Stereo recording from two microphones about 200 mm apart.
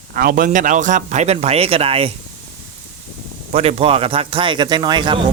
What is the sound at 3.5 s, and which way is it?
Speech, 30° right (ahead or behind).